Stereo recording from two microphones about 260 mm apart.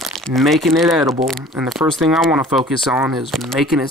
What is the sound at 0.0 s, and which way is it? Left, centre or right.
Speech, centre.